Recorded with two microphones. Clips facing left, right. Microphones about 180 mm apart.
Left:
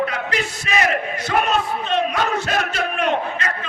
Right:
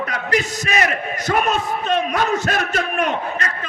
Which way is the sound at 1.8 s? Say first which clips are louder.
Right 1 dB; 45° right (ahead or behind).